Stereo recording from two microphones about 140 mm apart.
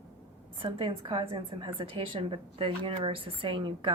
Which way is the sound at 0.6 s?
35° right (ahead or behind).